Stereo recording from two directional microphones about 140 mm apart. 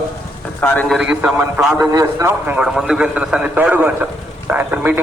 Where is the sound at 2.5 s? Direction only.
5° right (ahead or behind).